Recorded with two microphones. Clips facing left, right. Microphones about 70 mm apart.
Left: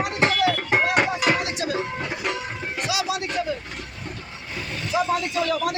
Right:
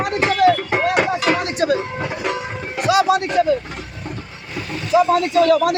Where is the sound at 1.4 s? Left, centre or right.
Right.